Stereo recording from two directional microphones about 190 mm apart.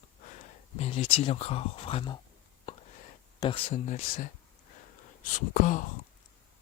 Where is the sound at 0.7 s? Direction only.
35° left (ahead or behind).